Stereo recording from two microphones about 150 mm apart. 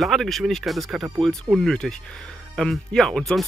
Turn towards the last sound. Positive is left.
turn(degrees=0)  # may be behind; listen again after turning